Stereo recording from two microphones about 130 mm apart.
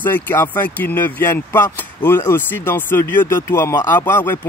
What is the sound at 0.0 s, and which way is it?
Speech, 15° left (ahead or behind).